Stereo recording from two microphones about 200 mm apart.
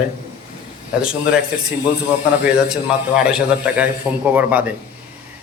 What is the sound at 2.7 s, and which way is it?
A man's voice, 5° right (ahead or behind).